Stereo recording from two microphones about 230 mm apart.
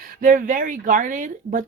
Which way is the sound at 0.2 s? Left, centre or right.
Right.